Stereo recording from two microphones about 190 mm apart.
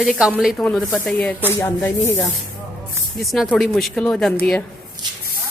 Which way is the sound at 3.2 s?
Centre (ahead or behind).